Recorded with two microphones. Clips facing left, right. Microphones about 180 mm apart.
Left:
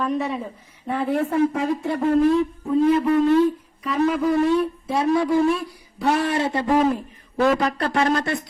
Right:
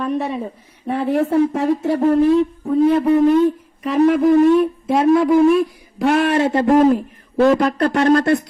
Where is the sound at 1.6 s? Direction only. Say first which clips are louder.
Right 6 dB; 75° right (ahead or behind).